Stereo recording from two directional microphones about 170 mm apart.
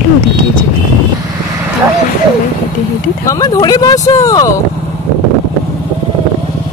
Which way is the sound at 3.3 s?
20° left (ahead or behind).